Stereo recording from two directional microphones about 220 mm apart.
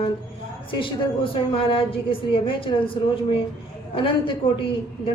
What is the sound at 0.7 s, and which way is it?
A woman's voice, 25° left (ahead or behind).